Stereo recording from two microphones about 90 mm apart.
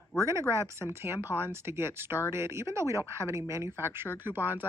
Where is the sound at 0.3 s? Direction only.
30° right (ahead or behind).